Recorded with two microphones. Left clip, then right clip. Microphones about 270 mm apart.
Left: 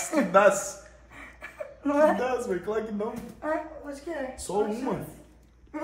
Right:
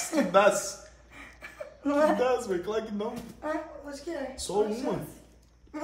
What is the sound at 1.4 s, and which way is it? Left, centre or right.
Chuckle, centre.